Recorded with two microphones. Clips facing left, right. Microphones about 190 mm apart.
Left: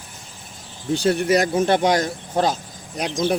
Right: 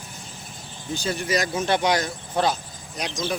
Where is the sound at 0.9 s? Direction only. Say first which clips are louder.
Left 7 dB; 70° left (ahead or behind).